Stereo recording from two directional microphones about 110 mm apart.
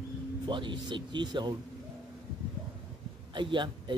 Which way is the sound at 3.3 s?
45° right (ahead or behind).